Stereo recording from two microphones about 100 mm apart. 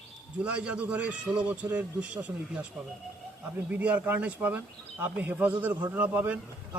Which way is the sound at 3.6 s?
15° right (ahead or behind).